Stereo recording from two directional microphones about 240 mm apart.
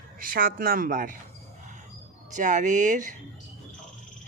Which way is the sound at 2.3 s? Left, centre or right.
Right.